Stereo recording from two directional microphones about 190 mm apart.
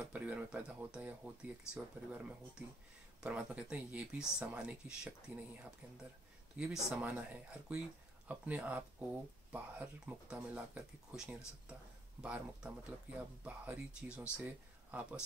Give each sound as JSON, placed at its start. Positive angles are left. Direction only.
{"t": 0.0, "sound": "speech", "side_deg": -5}